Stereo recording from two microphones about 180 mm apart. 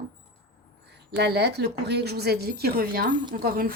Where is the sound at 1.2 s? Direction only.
65° right (ahead or behind).